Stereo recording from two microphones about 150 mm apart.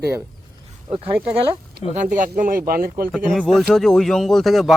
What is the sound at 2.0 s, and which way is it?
Speech, 60° right (ahead or behind).